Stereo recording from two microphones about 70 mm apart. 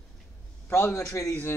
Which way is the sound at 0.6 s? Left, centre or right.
Left.